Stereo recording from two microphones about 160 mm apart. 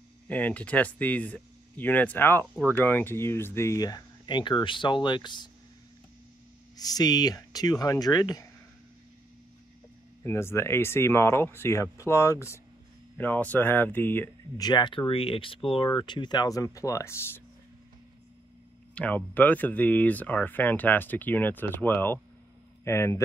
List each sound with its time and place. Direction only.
0.3 s speech: 10° left (ahead or behind); by 5.5 s 30° left (ahead or behind)
6.8 s speech: 25° left (ahead or behind)
10.2 s speech: 15° left (ahead or behind)
14.6 s speech: 30° left (ahead or behind)
18.9 s speech: 10° left (ahead or behind)